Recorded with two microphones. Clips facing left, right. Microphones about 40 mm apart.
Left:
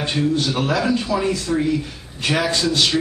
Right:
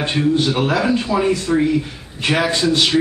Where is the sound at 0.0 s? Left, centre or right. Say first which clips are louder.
Right 3 dB; right.